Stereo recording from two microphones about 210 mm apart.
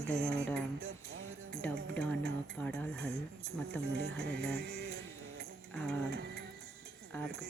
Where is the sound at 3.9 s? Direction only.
50° right (ahead or behind).